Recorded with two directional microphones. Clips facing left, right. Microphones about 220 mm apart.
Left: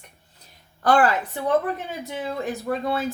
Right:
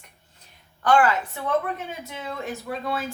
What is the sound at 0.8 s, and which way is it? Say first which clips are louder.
Speech: left 1 dB; 35° left (ahead or behind).